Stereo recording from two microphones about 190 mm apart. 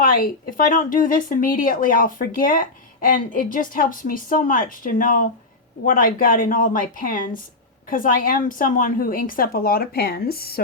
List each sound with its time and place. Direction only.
0.0 s speech: 50° left (ahead or behind)